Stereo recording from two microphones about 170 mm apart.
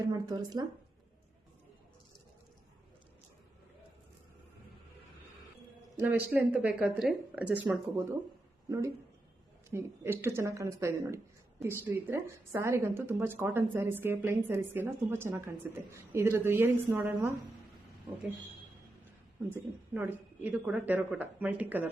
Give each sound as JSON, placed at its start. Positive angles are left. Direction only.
{"t": 0.0, "sound": "speech", "side_deg": -25}
{"t": 6.0, "sound": "a woman's voice", "side_deg": -10}
{"t": 9.6, "sound": "a woman's voice", "side_deg": -15}
{"t": 19.5, "sound": "a woman's voice", "side_deg": -10}